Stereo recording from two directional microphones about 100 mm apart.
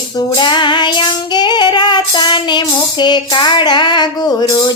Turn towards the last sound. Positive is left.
turn(degrees=40)  # may be behind; listen again after turning